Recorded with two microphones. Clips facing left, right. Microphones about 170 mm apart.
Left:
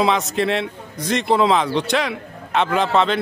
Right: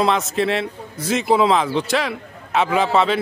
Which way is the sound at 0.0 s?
Centre (ahead or behind).